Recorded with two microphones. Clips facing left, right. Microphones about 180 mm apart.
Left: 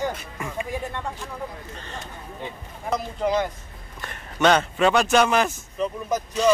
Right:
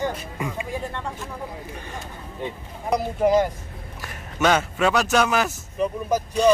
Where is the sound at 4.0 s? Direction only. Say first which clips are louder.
Left 2 dB; 5° right (ahead or behind).